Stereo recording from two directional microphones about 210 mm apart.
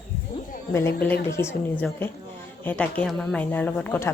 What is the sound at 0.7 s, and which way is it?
Speech, 10° left (ahead or behind).